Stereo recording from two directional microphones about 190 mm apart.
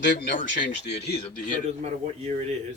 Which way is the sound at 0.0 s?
70° left (ahead or behind).